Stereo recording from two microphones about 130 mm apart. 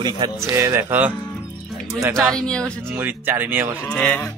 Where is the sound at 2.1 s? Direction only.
5° left (ahead or behind).